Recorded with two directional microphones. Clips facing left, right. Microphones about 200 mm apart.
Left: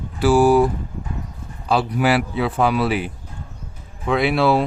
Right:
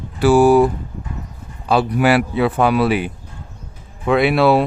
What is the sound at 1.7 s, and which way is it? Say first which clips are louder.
Speech: right 3 dB; 60° right (ahead or behind).